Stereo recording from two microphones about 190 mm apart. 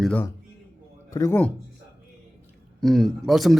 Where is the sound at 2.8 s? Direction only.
Centre (ahead or behind).